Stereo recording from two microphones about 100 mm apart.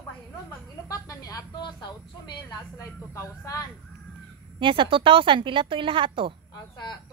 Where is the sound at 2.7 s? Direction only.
30° left (ahead or behind).